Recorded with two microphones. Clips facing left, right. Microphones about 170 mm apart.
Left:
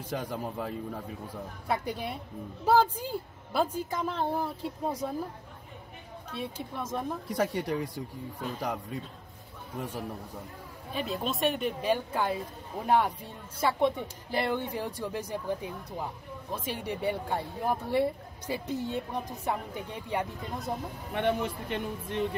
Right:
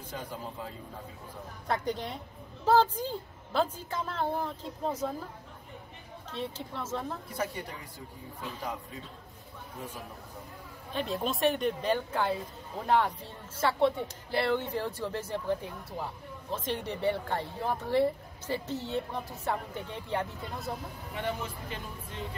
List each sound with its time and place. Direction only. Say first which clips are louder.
0.1 s speech: left 6 dB; 75° left (ahead or behind)
1.7 s a woman's voice: even; 10° left (ahead or behind)
6.3 s a woman's voice: left 1 dB; 15° left (ahead or behind)
7.2 s speech: left 6 dB; 70° left (ahead or behind)
9.8 s speech: left 6 dB; 70° left (ahead or behind)
10.9 s a woman's voice: even; 5° left (ahead or behind)
21.1 s speech: left 7 dB; 65° left (ahead or behind)